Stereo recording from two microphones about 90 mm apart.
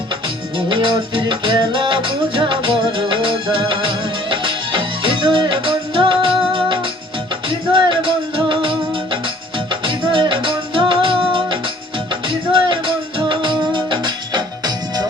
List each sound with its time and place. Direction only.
0.7 s music: 65° right (ahead or behind)
9.8 s music: 70° right (ahead or behind); by 15.0 s 55° right (ahead or behind)